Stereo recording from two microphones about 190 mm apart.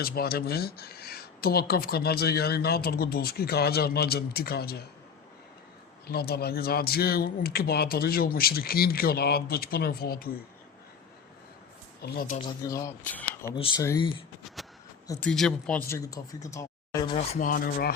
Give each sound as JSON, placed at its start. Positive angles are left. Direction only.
{"t": 0.0, "sound": "speech", "side_deg": 55}
{"t": 6.1, "sound": "speech", "side_deg": 55}
{"t": 12.0, "sound": "speech", "side_deg": 50}
{"t": 12.4, "sound": "speech", "side_deg": 20}
{"t": 13.8, "sound": "speech", "side_deg": 20}
{"t": 14.4, "sound": "a sound", "side_deg": 0}
{"t": 15.2, "sound": "speech", "side_deg": 5}
{"t": 15.9, "sound": "speech", "side_deg": 15}
{"t": 17.1, "sound": "speech", "side_deg": 35}